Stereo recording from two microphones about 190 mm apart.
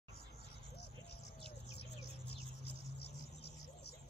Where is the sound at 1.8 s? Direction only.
60° left (ahead or behind).